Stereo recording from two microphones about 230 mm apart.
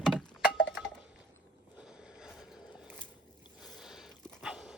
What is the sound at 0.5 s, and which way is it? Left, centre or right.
Wind chime, left.